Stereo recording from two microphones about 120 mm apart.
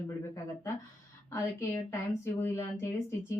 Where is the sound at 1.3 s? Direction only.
20° left (ahead or behind).